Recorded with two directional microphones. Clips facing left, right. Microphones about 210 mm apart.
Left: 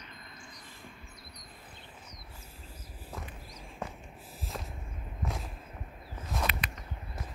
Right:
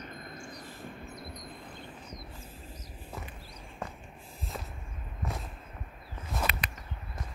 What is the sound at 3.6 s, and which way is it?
Walk, 5° left (ahead or behind).